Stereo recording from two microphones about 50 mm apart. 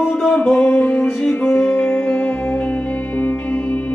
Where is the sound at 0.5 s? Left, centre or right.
Left.